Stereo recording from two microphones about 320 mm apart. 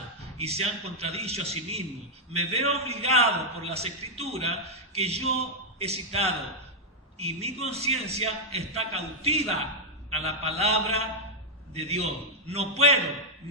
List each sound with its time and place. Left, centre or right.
0.3 s a man's voice: centre